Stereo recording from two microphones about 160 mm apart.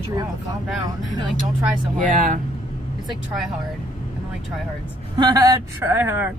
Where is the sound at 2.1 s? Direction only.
55° right (ahead or behind).